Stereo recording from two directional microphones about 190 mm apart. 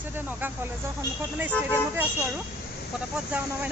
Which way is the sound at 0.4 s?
10° right (ahead or behind).